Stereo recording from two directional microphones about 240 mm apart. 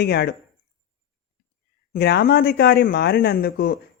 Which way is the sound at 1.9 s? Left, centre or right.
Left.